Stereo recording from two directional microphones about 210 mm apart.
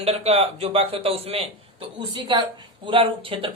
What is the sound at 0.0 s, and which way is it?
Speech, 30° right (ahead or behind).